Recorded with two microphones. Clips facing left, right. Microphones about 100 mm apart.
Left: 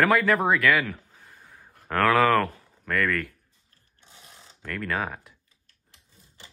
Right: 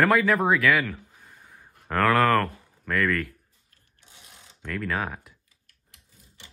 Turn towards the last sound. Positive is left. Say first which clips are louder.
# left 1 dB
turn(degrees=35)  # may be behind; listen again after turning